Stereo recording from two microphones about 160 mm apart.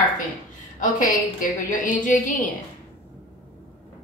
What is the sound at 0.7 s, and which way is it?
A woman's voice, 50° left (ahead or behind).